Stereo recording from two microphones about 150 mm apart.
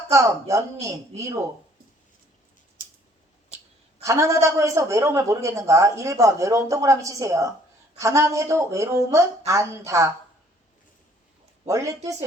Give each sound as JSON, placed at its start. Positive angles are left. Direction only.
{"t": 0.1, "sound": "a woman's voice", "side_deg": -20}
{"t": 4.0, "sound": "a woman's voice", "side_deg": -20}
{"t": 11.6, "sound": "a woman's voice", "side_deg": -20}